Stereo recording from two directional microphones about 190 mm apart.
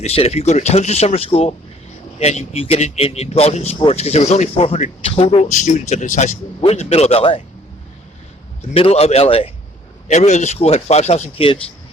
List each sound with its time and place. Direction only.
0.0 s speech: 35° left (ahead or behind)
8.7 s speech: 30° left (ahead or behind)